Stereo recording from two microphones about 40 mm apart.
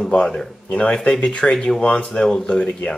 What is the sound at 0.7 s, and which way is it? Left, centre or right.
Speech, left.